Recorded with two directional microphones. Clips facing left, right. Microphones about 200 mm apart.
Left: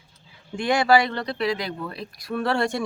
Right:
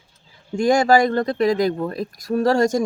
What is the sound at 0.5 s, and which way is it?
Speech, 45° right (ahead or behind).